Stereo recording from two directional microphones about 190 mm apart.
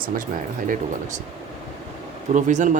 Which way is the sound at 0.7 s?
40° right (ahead or behind).